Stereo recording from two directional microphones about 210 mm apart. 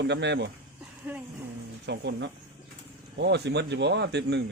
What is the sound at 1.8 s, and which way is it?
Speech, 55° right (ahead or behind).